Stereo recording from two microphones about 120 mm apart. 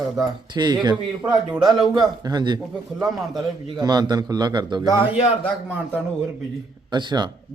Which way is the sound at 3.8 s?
35° right (ahead or behind).